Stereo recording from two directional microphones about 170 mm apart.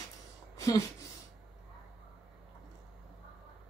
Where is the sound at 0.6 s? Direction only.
20° left (ahead or behind).